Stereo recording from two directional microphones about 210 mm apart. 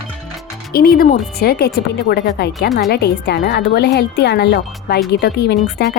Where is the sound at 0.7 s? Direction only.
45° left (ahead or behind).